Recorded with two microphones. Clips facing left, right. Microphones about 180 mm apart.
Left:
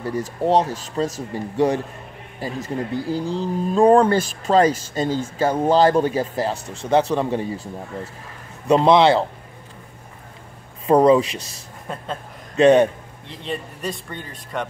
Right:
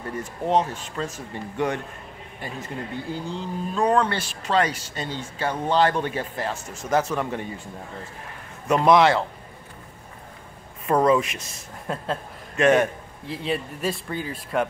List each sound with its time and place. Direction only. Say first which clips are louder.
0.0 s speech: left 6 dB; 35° left (ahead or behind)
8.6 s speech: left 3 dB; 30° left (ahead or behind)
10.9 s speech: left 5 dB; 30° left (ahead or behind)
11.9 s speech: right 2 dB; centre (ahead or behind)
12.5 s speech: left 5 dB; 30° left (ahead or behind)
13.3 s speech: right 2 dB; 5° right (ahead or behind)